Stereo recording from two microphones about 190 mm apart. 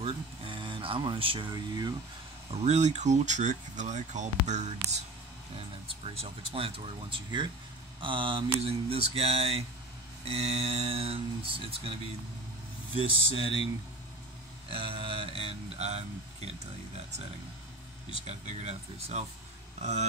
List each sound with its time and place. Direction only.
0.0 s speech: 30° right (ahead or behind)
2.6 s speech: 35° right (ahead or behind)
13.0 s speech: 25° right (ahead or behind)
14.7 s speech: 30° right (ahead or behind)
18.2 s speech: 35° right (ahead or behind)